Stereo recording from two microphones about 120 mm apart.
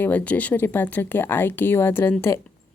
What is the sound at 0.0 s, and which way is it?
A woman's voice, 15° left (ahead or behind).